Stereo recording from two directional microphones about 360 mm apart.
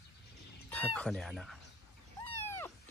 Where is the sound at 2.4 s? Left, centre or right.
Centre.